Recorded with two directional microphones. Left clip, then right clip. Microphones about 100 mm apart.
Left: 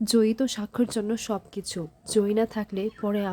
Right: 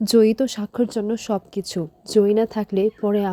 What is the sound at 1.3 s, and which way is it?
A woman's voice, 50° right (ahead or behind).